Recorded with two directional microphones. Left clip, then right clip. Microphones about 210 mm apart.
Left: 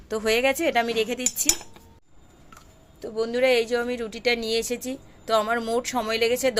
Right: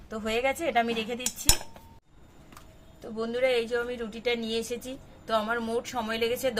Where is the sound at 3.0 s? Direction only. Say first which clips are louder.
Left 5 dB; 35° left (ahead or behind).